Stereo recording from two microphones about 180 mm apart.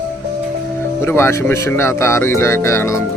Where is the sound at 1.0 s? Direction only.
15° left (ahead or behind).